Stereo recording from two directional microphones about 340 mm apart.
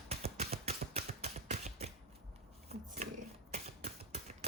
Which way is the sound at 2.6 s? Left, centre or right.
Right.